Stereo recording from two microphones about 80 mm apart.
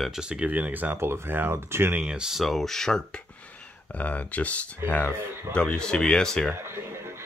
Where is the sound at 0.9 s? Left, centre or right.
Right.